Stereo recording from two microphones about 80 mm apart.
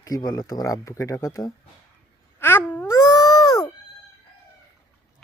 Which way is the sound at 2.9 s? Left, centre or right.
Left.